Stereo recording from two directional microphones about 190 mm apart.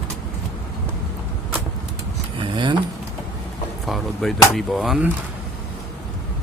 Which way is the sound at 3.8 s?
Centre (ahead or behind).